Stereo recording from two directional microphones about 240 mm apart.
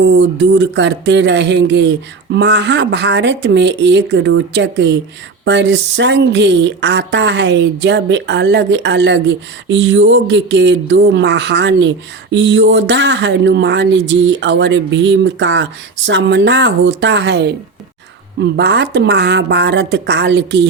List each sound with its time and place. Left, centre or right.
0.0 s speech: right